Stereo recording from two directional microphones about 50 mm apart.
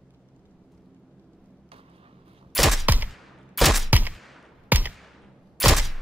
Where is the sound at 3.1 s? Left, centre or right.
Centre.